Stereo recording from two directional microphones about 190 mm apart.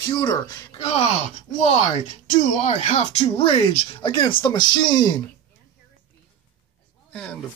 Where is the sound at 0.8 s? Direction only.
35° left (ahead or behind).